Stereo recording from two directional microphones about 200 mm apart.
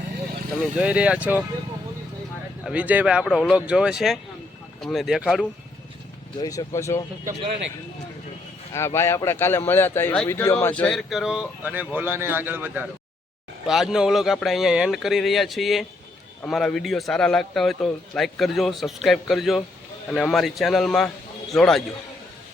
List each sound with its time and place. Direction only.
0.5 s a man's voice: 5° right (ahead or behind)
2.6 s a man's voice: 5° right (ahead or behind)
6.4 s speech: 20° left (ahead or behind)
8.7 s a man's voice: 15° left (ahead or behind)